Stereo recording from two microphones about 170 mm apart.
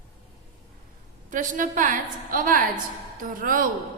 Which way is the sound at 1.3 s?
50° right (ahead or behind).